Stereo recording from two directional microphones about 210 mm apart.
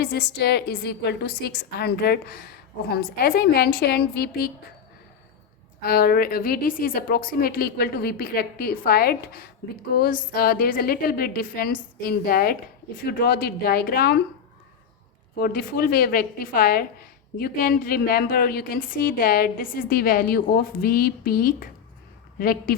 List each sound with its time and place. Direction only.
0.0 s a woman's voice: 50° left (ahead or behind)
5.8 s a woman's voice: 45° left (ahead or behind)
15.4 s a woman's voice: 45° left (ahead or behind)